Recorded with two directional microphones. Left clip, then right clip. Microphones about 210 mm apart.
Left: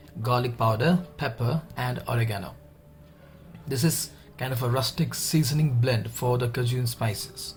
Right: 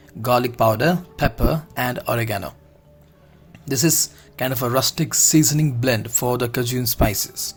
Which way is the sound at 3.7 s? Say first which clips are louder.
Right 9 dB; 40° right (ahead or behind).